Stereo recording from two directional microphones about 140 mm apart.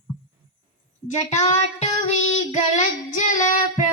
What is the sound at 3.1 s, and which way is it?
Child singing, 65° left (ahead or behind).